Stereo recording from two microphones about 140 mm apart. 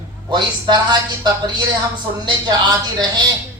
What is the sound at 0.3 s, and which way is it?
Speech, 30° right (ahead or behind).